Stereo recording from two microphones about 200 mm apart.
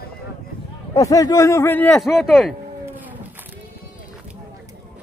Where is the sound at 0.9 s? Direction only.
15° left (ahead or behind); by 2.5 s centre (ahead or behind).